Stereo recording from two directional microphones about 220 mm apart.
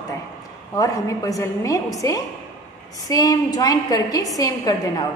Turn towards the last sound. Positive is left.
turn(degrees=15)  # may be behind; listen again after turning